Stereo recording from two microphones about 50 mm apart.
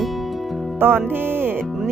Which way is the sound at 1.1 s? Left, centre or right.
Right.